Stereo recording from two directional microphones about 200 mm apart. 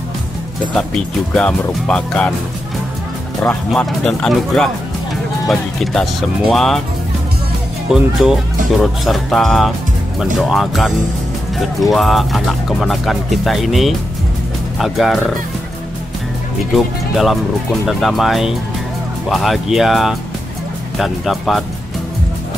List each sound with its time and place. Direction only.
0.7 s speech: 5° left (ahead or behind)
3.4 s speech: 5° left (ahead or behind)
7.9 s speech: centre (ahead or behind)
16.7 s speech: centre (ahead or behind)